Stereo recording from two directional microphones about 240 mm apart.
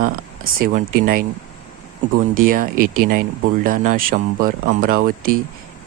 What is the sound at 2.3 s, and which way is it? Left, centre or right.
Speech, right.